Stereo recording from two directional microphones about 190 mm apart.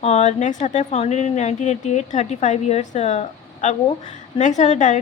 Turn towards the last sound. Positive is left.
turn(degrees=40)  # may be behind; listen again after turning